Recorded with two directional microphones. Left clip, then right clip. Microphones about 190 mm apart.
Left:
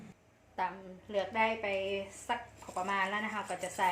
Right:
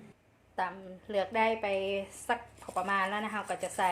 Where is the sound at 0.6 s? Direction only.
30° right (ahead or behind).